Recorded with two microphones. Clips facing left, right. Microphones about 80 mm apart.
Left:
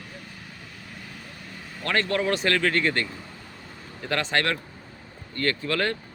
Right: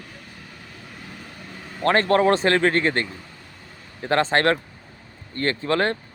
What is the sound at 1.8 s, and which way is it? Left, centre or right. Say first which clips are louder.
Speech: right 7 dB; right.